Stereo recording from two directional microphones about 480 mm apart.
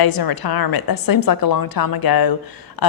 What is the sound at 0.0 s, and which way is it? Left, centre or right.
A woman's voice, left.